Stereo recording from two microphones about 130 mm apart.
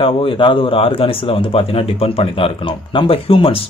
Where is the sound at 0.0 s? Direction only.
45° left (ahead or behind).